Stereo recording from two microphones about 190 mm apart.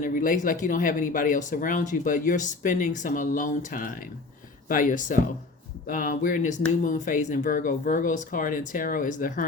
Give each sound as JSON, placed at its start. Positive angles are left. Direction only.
{"t": 0.0, "sound": "speech", "side_deg": 45}